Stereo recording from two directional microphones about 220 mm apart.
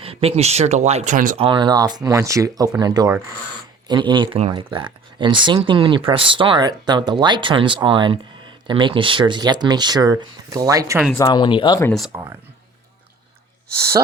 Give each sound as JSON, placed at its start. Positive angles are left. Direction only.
{"t": 0.0, "sound": "speech", "side_deg": -25}
{"t": 1.4, "sound": "speech", "side_deg": -20}
{"t": 11.2, "sound": "speech", "side_deg": 20}
{"t": 11.9, "sound": "speech", "side_deg": 0}
{"t": 13.7, "sound": "speech", "side_deg": -45}